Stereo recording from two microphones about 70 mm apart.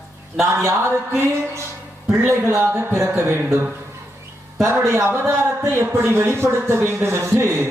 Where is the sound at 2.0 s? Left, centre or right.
Right.